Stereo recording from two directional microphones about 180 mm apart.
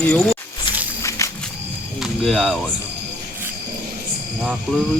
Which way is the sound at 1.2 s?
15° left (ahead or behind).